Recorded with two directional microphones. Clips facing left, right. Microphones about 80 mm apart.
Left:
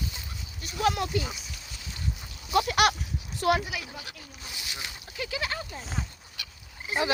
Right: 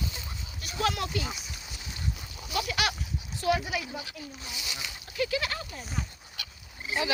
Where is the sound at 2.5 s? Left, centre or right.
Left.